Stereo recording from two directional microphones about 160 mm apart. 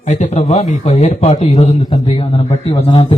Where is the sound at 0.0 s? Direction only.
50° left (ahead or behind).